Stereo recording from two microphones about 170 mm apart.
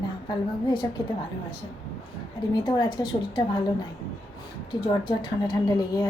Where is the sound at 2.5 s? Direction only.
25° left (ahead or behind).